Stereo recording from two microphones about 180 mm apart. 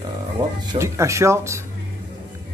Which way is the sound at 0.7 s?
15° right (ahead or behind).